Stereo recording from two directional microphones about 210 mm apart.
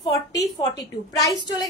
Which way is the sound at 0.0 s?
20° left (ahead or behind).